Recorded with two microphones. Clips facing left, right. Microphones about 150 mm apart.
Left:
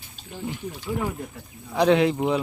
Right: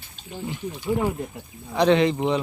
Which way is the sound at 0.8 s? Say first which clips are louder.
Right 5 dB; 15° right (ahead or behind).